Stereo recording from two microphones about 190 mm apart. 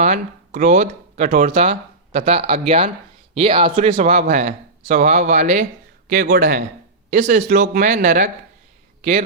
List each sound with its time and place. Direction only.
0.0 s speech: 40° right (ahead or behind)
6.1 s a man's voice: 50° right (ahead or behind)
7.1 s speech: 40° right (ahead or behind)
9.0 s a sound: 35° right (ahead or behind)